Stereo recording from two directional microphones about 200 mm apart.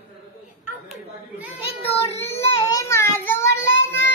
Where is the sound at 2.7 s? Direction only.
15° left (ahead or behind).